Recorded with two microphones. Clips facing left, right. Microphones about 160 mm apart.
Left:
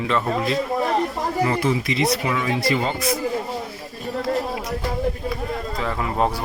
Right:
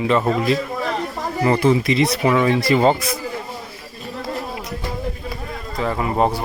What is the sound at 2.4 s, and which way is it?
Speech, 40° right (ahead or behind).